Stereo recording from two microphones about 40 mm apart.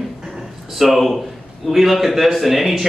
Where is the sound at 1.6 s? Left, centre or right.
Centre.